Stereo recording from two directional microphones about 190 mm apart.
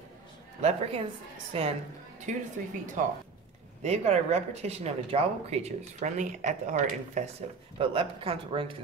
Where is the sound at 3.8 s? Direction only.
35° right (ahead or behind).